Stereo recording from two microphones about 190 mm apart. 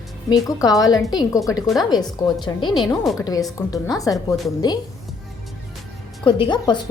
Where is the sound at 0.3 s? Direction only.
20° left (ahead or behind).